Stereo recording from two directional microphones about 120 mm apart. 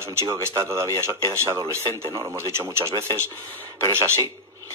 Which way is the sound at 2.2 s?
20° right (ahead or behind).